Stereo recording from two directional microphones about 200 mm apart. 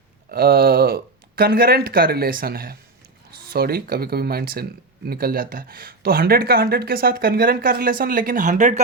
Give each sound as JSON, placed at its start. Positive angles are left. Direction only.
{"t": 0.3, "sound": "speech", "side_deg": -50}